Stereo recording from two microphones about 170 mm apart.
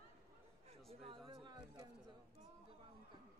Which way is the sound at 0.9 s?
35° right (ahead or behind).